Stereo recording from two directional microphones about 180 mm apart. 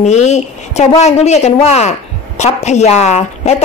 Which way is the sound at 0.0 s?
40° left (ahead or behind).